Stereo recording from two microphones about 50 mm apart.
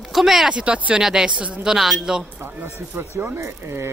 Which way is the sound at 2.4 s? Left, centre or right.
Right.